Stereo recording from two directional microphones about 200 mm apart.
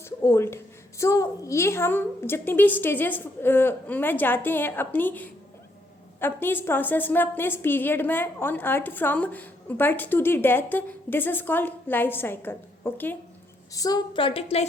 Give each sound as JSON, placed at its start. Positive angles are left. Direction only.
{"t": 0.0, "sound": "a woman's voice", "side_deg": 15}